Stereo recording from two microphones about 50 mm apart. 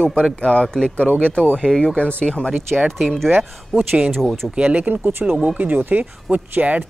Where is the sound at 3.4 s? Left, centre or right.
Right.